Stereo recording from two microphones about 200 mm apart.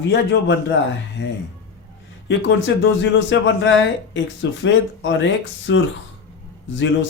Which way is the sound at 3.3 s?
65° left (ahead or behind).